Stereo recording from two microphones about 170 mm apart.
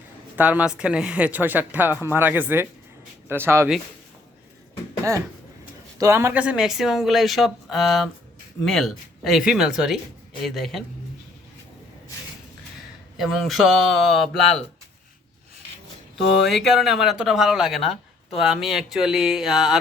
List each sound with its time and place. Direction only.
0.3 s speech: 10° right (ahead or behind)
6.0 s speech: 15° right (ahead or behind); by 10.8 s centre (ahead or behind)
13.1 s speech: centre (ahead or behind)
16.5 s speech: centre (ahead or behind)